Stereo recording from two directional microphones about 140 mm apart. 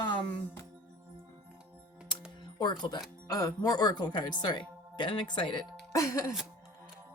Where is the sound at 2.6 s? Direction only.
30° left (ahead or behind).